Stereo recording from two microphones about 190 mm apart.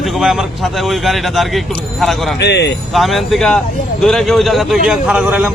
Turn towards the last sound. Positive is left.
turn(degrees=-5)  # may be behind; listen again after turning